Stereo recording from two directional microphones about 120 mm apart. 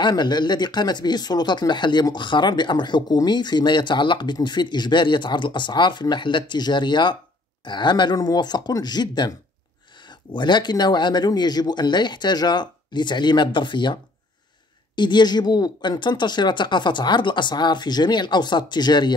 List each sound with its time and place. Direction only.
0.0 s speech: 35° left (ahead or behind)
15.0 s speech: 40° left (ahead or behind)